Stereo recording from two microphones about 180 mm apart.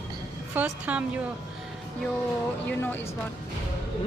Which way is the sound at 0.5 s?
5° right (ahead or behind).